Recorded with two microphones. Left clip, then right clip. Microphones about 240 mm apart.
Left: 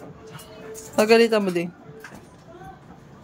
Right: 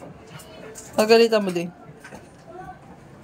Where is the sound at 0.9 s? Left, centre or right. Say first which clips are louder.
Right 1 dB; centre.